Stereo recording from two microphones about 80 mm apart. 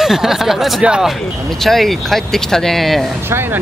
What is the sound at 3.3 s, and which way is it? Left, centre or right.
Speech, right.